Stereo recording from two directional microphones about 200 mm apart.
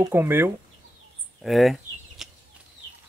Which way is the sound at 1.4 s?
Centre (ahead or behind).